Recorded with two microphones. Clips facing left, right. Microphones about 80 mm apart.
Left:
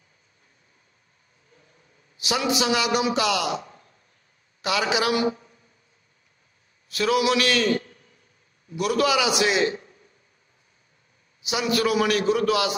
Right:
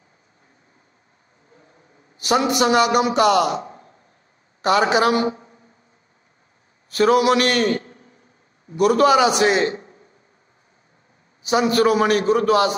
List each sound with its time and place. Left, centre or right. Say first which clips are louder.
1.5 s vehicle: right 6 dB; right
2.1 s a man's voice: right 6 dB; right
6.9 s a man's voice: right 6 dB; right
7.8 s a sound: right 5 dB; right
8.7 s a man's voice: right 7 dB; right
11.4 s a man's voice: right 7 dB; right